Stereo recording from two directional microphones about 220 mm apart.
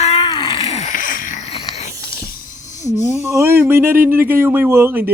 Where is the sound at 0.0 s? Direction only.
25° left (ahead or behind).